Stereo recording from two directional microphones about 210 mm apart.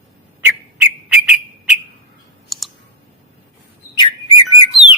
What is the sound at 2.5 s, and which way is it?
Clicking, centre (ahead or behind).